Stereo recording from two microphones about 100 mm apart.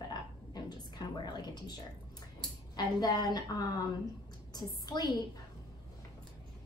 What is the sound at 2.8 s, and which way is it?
A woman's voice, 45° left (ahead or behind).